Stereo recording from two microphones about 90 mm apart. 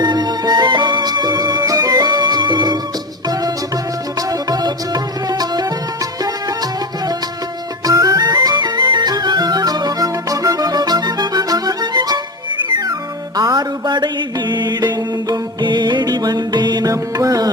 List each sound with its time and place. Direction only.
0.0 s music: 50° right (ahead or behind)
4.3 s music: 45° right (ahead or behind)
7.9 s music: 45° right (ahead or behind)